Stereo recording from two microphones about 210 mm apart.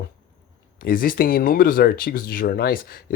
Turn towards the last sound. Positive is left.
turn(degrees=45)  # may be behind; listen again after turning